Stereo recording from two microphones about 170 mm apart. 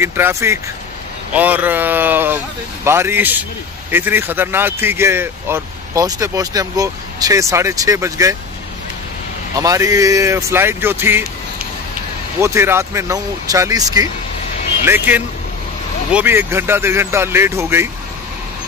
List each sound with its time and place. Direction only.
0.0 s speech: 15° right (ahead or behind)
9.6 s speech: 20° right (ahead or behind)
12.4 s speech: 15° right (ahead or behind)
14.9 s speech: 10° right (ahead or behind)